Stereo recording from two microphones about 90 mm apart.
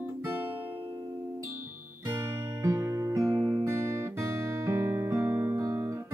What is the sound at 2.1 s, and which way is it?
Music, 35° right (ahead or behind).